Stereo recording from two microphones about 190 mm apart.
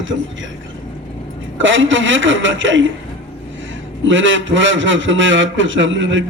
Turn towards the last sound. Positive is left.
turn(degrees=-80)